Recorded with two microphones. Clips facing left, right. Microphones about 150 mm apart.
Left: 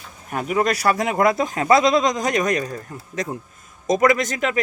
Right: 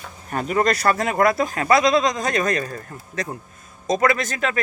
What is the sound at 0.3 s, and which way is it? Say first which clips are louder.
Speech: even; 5° left (ahead or behind).